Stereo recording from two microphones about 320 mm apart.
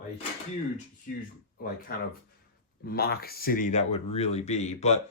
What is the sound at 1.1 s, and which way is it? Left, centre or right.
Speech, left.